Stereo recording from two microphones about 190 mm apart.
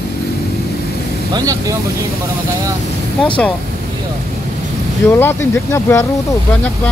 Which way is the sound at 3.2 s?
5° left (ahead or behind).